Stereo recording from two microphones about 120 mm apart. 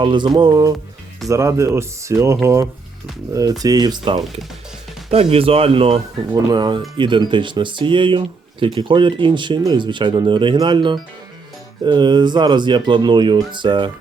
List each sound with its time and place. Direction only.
0.0 s speech: 40° right (ahead or behind)
1.3 s speech: 25° right (ahead or behind)
5.1 s speech: 55° right (ahead or behind)
6.3 s speech: 35° right (ahead or behind)